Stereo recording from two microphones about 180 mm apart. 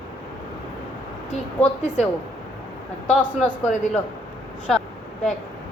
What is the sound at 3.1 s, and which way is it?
Speech, 10° left (ahead or behind).